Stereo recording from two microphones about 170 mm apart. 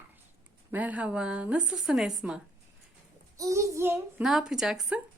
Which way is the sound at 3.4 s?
20° right (ahead or behind).